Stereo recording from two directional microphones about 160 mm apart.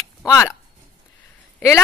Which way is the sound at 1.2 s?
15° left (ahead or behind).